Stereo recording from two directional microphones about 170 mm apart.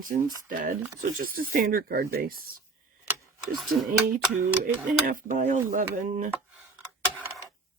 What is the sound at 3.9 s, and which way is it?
Speech, 60° right (ahead or behind).